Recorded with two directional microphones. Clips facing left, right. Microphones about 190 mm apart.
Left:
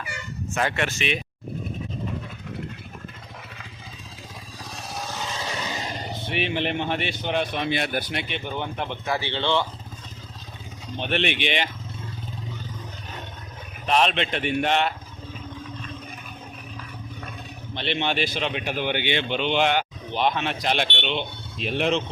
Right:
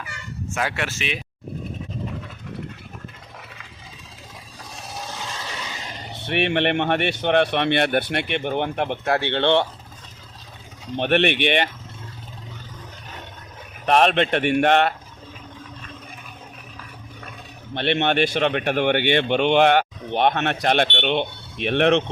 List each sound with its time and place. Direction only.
0.5 s speech: 5° right (ahead or behind)
6.2 s speech: 65° right (ahead or behind)
10.9 s speech: 65° right (ahead or behind)
13.8 s speech: 55° right (ahead or behind)
17.7 s speech: 60° right (ahead or behind)